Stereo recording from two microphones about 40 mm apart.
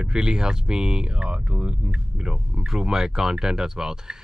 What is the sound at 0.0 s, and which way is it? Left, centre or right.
Speech, centre.